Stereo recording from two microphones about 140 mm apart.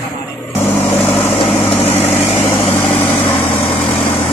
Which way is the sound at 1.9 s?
50° left (ahead or behind).